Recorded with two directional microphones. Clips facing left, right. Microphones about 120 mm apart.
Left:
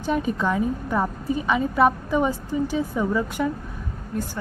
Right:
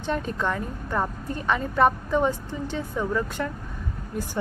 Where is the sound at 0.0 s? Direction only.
10° left (ahead or behind).